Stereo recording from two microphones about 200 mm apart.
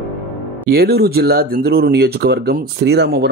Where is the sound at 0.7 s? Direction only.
50° right (ahead or behind).